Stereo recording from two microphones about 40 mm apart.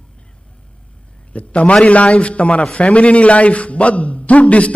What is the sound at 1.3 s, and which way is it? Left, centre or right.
A man's voice, left.